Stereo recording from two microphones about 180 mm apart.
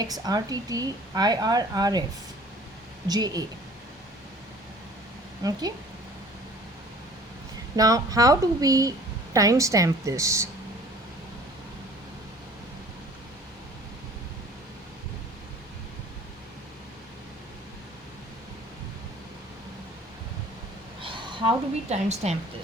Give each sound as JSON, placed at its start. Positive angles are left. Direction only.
{"t": 0.0, "sound": "speech", "side_deg": -20}
{"t": 3.1, "sound": "speech", "side_deg": -20}
{"t": 5.4, "sound": "speech", "side_deg": -20}
{"t": 7.8, "sound": "a woman's voice", "side_deg": -20}
{"t": 21.0, "sound": "a woman's voice", "side_deg": -30}